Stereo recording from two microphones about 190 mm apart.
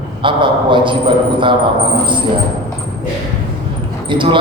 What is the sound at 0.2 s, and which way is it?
A man's voice, 25° right (ahead or behind).